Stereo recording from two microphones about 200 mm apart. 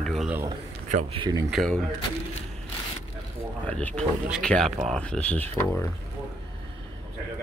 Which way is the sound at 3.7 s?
5° left (ahead or behind).